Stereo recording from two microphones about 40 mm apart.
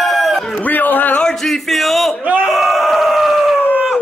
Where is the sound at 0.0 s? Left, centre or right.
Centre.